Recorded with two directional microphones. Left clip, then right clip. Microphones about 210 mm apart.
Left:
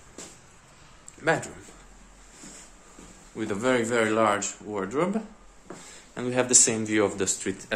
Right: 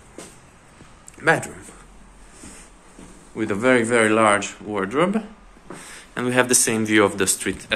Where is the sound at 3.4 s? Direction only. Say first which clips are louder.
Right 7 dB; 5° right (ahead or behind).